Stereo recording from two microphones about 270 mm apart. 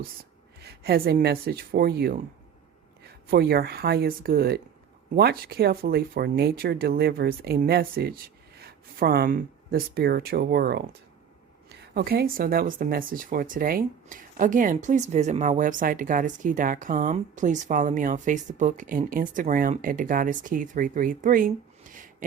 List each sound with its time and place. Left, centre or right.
0.6 s speech: right
3.2 s speech: right
11.9 s speech: right